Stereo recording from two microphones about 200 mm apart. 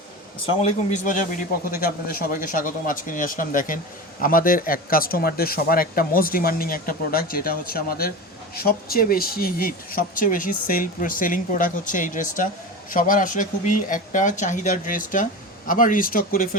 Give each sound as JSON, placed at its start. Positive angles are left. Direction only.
{"t": 0.4, "sound": "speech", "side_deg": 35}